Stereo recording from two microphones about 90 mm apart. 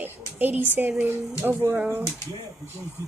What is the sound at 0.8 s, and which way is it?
Speech, 20° right (ahead or behind).